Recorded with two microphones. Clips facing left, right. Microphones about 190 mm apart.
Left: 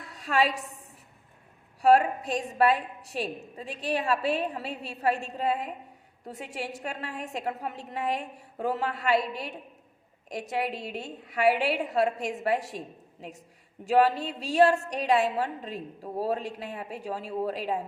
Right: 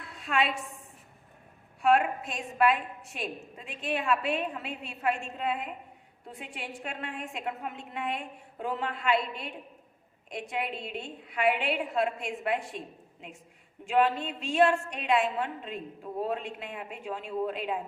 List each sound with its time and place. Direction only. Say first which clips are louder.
0.0 s a sound: left 3 dB; 40° left (ahead or behind)
1.8 s a woman's voice: left 4 dB; 35° left (ahead or behind)
13.8 s a woman's voice: left 3 dB; 40° left (ahead or behind)